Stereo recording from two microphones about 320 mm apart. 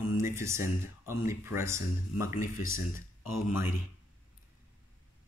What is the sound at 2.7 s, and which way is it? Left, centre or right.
Speech, left.